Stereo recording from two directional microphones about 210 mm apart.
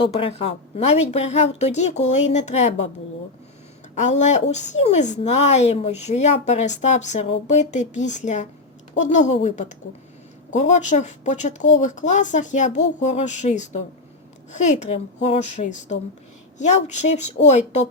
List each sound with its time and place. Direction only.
0.0 s a woman's voice: 25° left (ahead or behind)
3.9 s a woman's voice: 35° left (ahead or behind)